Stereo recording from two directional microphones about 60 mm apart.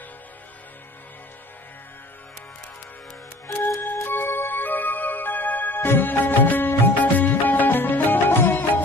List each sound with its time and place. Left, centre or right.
3.8 s music: left